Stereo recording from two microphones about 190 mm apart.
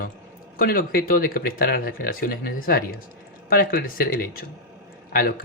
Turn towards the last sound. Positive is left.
turn(degrees=50)  # may be behind; listen again after turning